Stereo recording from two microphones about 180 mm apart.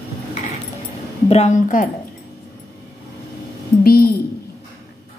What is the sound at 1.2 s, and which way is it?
Speech, 40° left (ahead or behind).